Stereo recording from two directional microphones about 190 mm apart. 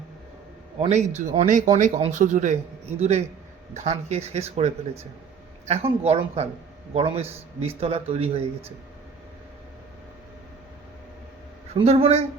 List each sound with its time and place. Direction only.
0.8 s speech: 35° right (ahead or behind)
11.7 s speech: 30° right (ahead or behind)